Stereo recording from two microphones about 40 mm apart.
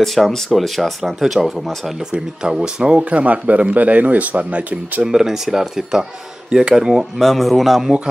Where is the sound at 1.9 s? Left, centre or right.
Centre; by 5.0 s right.